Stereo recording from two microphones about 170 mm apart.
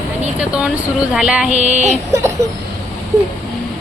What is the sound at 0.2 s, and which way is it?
Speech, 5° right (ahead or behind).